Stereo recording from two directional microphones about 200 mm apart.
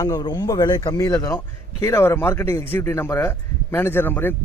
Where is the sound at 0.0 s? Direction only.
20° left (ahead or behind).